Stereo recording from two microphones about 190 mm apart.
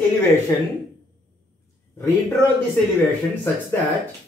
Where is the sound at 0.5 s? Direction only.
20° left (ahead or behind).